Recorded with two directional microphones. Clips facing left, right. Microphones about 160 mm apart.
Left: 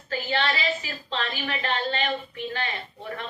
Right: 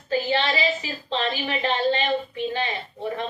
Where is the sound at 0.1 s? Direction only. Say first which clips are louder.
Right 4 dB; 20° right (ahead or behind).